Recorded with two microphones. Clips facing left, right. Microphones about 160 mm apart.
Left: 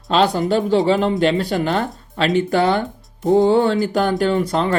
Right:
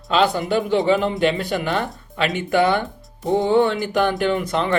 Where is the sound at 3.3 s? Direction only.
40° left (ahead or behind).